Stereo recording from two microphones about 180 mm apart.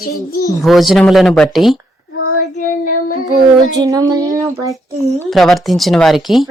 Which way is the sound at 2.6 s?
45° left (ahead or behind).